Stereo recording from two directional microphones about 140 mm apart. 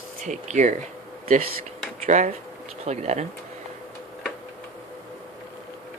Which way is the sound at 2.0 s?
55° right (ahead or behind).